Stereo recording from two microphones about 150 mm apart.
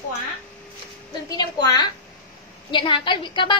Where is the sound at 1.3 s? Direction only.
30° left (ahead or behind).